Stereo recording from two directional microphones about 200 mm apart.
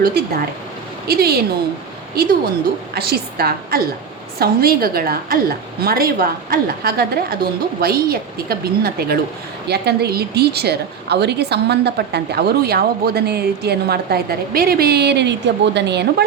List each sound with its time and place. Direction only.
0.0 s a woman's voice: 45° right (ahead or behind)
2.9 s a woman's voice: 50° right (ahead or behind)